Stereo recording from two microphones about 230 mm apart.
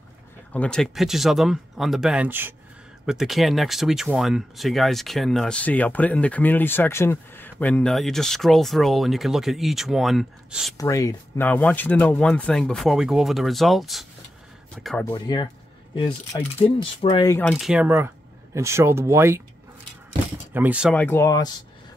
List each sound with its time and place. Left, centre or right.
0.5 s speech: centre
10.8 s speech: centre
15.1 s speech: centre
16.6 s speech: left; by 19.4 s centre
20.5 s speech: centre
20.9 s speech: centre